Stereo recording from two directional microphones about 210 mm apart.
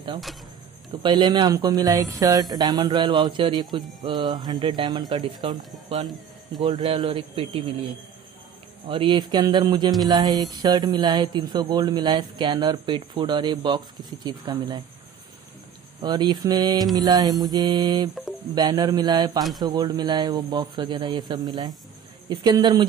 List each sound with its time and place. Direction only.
1.0 s speech: 20° right (ahead or behind)
8.8 s speech: 25° right (ahead or behind)
16.0 s speech: 20° right (ahead or behind)